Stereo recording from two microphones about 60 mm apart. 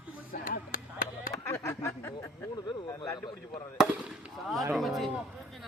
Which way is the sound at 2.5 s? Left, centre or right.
Left.